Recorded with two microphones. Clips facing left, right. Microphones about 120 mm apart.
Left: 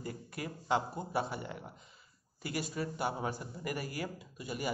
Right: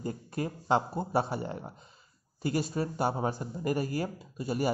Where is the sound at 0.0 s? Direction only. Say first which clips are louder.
Right 7 dB; 30° right (ahead or behind).